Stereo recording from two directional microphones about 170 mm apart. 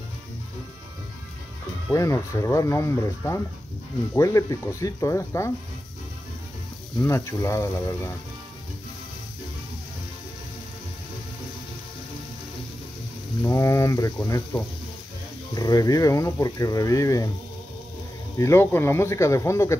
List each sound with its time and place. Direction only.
2.0 s speech: 20° left (ahead or behind)
7.0 s speech: 15° left (ahead or behind)
13.5 s speech: 15° left (ahead or behind)
18.4 s speech: 15° left (ahead or behind)